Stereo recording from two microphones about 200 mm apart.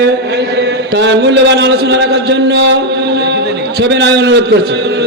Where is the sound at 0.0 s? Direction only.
55° right (ahead or behind).